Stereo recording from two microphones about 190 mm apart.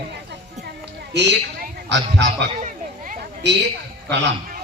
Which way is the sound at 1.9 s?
65° right (ahead or behind).